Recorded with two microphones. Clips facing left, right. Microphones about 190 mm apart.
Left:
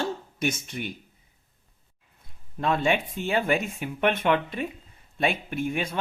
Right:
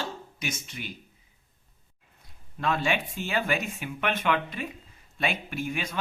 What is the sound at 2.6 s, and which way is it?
Speech, 25° left (ahead or behind).